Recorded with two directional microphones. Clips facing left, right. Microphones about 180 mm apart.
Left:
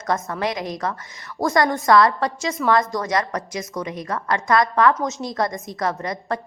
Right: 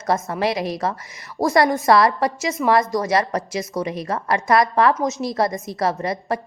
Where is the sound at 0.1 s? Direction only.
25° right (ahead or behind).